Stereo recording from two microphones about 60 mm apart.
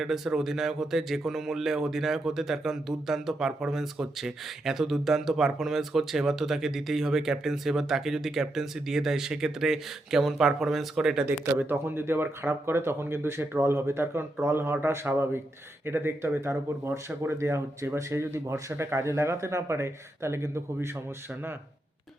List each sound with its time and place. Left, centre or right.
0.0 s a man's voice: centre
11.3 s speech: right